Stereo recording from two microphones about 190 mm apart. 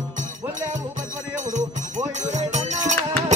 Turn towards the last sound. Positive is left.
turn(degrees=-40)  # may be behind; listen again after turning